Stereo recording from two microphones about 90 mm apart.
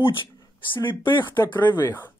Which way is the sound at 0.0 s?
70° left (ahead or behind).